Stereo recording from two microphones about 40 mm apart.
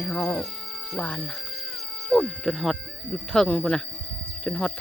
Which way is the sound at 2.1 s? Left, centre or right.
Centre.